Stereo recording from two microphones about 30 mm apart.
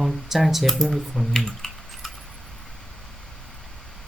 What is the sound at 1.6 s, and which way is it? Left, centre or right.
Typing, left.